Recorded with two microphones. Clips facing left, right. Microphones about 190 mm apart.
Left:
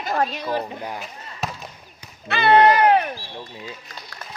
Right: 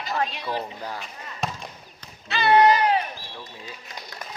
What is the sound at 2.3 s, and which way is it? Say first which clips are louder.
Speech: left 2 dB; 55° left (ahead or behind).